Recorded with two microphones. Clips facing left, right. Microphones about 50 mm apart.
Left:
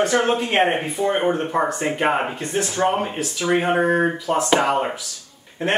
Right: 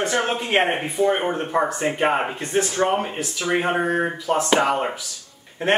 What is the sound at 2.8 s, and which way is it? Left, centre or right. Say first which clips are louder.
Speech: left 1 dB; centre.